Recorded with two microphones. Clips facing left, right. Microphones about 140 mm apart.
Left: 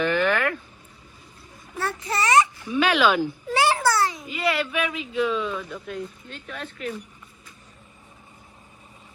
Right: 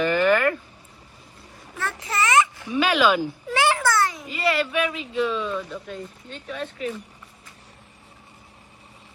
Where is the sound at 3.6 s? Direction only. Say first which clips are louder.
Even; 35° left (ahead or behind).